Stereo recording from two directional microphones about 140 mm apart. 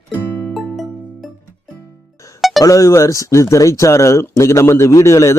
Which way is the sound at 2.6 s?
25° left (ahead or behind).